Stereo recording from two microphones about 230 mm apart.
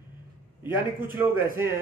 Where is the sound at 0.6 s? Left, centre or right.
Centre.